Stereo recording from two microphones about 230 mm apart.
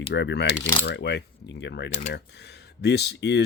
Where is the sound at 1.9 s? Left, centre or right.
Left.